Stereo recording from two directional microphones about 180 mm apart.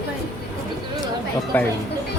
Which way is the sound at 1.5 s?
10° left (ahead or behind).